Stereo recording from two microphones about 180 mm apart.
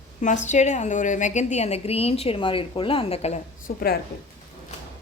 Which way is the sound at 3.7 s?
55° left (ahead or behind).